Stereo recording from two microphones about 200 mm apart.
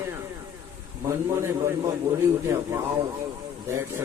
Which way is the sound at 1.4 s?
15° right (ahead or behind).